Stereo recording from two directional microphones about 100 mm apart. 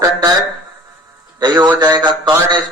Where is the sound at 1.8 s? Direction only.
45° right (ahead or behind).